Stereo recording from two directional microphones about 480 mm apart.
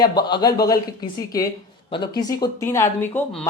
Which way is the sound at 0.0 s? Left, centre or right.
Centre.